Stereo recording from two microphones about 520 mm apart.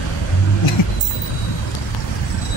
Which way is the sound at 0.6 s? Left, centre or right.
Left.